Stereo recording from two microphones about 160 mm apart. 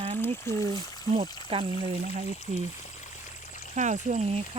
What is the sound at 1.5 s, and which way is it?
Speech, 40° right (ahead or behind).